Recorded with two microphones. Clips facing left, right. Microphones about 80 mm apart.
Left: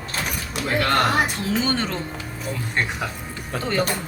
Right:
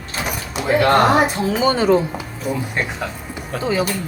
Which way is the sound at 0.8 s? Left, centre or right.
Centre.